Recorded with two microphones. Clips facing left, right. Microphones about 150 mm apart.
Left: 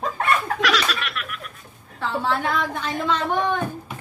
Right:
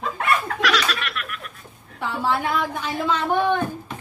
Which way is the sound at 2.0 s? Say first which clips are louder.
Even; 10° right (ahead or behind).